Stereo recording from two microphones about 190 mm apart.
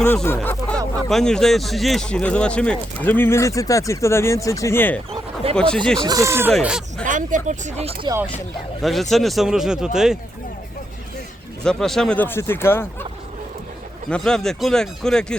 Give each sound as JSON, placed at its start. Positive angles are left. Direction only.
{"t": 0.0, "sound": "a sound", "side_deg": 10}
{"t": 1.1, "sound": "speech", "side_deg": 5}
{"t": 5.1, "sound": "a sound", "side_deg": -30}
{"t": 5.5, "sound": "speech", "side_deg": 5}
{"t": 6.0, "sound": "speech", "side_deg": -20}
{"t": 7.0, "sound": "speech", "side_deg": -40}
{"t": 8.8, "sound": "speech", "side_deg": 0}
{"t": 11.6, "sound": "speech", "side_deg": 5}
{"t": 14.1, "sound": "speech", "side_deg": 5}